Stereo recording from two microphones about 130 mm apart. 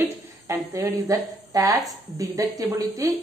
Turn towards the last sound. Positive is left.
turn(degrees=-25)  # may be behind; listen again after turning